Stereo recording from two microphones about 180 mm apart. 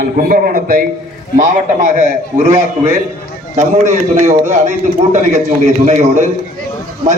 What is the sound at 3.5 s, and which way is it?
A man's voice, 45° right (ahead or behind).